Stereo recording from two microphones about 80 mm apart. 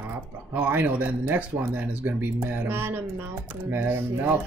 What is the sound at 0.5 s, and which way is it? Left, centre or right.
Speech, right.